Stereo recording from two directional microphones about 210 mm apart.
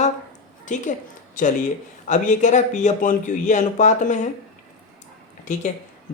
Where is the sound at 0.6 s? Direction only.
35° left (ahead or behind).